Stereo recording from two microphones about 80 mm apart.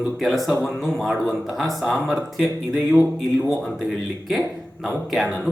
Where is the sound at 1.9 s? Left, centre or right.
Centre.